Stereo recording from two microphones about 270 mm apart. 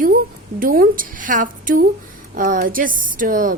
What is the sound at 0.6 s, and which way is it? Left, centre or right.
A woman's voice, right.